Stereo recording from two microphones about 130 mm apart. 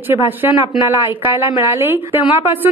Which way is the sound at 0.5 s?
35° left (ahead or behind).